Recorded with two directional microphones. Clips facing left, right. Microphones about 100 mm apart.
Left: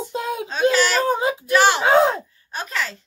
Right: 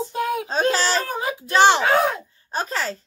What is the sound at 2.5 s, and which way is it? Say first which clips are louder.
Speech: right 2 dB; 35° right (ahead or behind).